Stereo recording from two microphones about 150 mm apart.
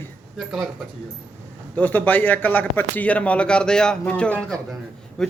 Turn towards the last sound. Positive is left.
turn(degrees=5)  # may be behind; listen again after turning